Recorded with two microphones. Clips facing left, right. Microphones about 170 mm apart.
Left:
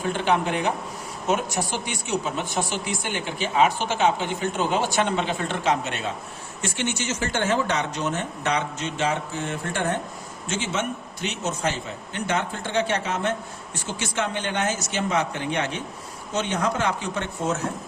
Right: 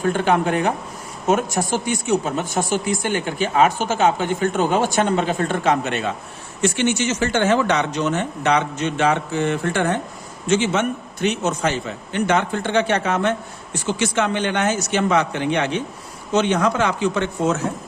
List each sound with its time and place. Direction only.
0.0 s speech: 50° right (ahead or behind)
6.6 s speech: 80° right
10.5 s a man's voice: 70° right (ahead or behind)
12.1 s speech: 75° right (ahead or behind)
13.8 s speech: 80° right